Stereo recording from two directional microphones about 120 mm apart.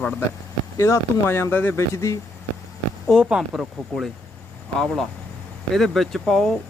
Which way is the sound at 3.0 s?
5° right (ahead or behind).